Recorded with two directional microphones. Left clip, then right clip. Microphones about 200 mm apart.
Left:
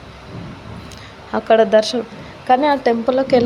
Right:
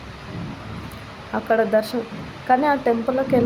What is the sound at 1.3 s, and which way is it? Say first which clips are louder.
Speech: left 6 dB; 30° left (ahead or behind).